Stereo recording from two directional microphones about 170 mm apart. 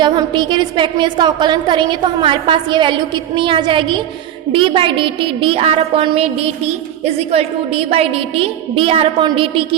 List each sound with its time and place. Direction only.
0.0 s a woman's voice: 25° right (ahead or behind)